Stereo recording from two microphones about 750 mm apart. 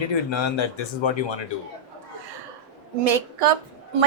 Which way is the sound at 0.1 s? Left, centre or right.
Left.